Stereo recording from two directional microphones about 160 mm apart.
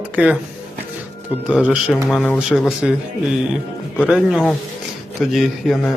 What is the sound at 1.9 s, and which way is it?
Speech, 5° left (ahead or behind).